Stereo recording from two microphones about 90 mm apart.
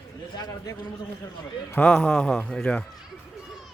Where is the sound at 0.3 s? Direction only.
50° left (ahead or behind).